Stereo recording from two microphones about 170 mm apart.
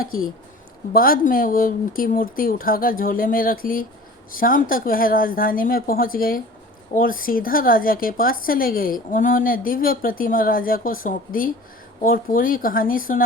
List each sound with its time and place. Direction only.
0.9 s speech: 60° left (ahead or behind)